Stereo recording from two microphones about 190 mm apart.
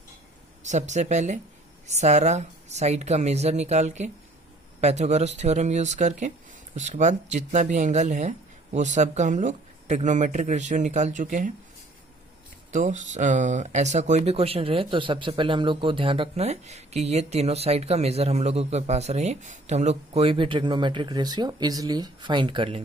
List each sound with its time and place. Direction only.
0.6 s speech: 40° right (ahead or behind)
12.7 s speech: 40° right (ahead or behind)